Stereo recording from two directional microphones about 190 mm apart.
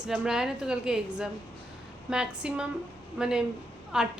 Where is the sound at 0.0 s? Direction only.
5° right (ahead or behind).